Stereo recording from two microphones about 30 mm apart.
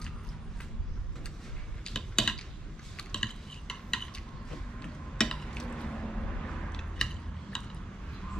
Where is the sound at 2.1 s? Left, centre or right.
Left.